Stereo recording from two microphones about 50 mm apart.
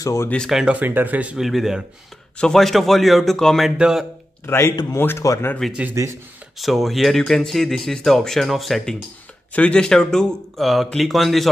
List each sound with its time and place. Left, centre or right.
0.0 s speech: left
0.7 s speech: right
1.4 s speech: centre
2.3 s speech: centre
3.7 s a man's voice: centre
4.5 s speech: left
5.6 s speech: centre
9.5 s speech: left
9.8 s speech: centre
10.6 s speech: centre